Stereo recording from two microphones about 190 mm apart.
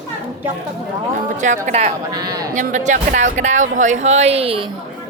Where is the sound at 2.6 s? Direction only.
40° right (ahead or behind).